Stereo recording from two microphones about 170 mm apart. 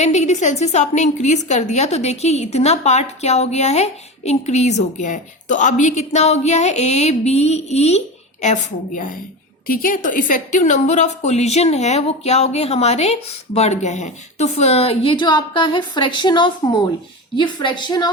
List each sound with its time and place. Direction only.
0.0 s a woman's voice: 40° left (ahead or behind); by 18.1 s 25° left (ahead or behind)